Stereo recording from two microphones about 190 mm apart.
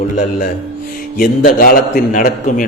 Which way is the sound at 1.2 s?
50° left (ahead or behind).